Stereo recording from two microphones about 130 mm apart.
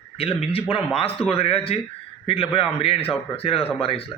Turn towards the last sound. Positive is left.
turn(degrees=45)  # may be behind; listen again after turning